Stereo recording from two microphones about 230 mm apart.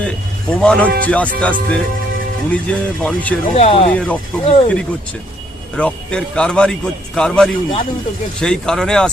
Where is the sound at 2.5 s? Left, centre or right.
Centre.